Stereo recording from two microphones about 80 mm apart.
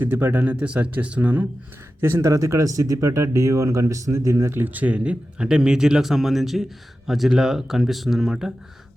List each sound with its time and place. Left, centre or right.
0.0 s speech: right
0.5 s speech: centre
2.0 s speech: right; by 8.5 s centre